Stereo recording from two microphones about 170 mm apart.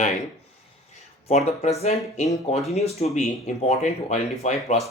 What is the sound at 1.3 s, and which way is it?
Speech, 40° left (ahead or behind).